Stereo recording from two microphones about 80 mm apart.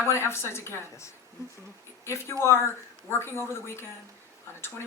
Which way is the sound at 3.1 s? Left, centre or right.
Left.